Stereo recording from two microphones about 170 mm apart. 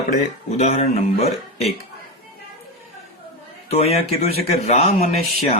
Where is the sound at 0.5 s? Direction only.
45° left (ahead or behind).